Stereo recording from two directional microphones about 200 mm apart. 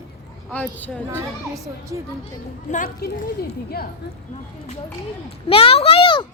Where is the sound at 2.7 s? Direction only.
45° left (ahead or behind).